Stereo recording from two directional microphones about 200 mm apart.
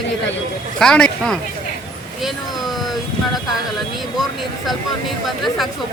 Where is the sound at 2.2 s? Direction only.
Centre (ahead or behind).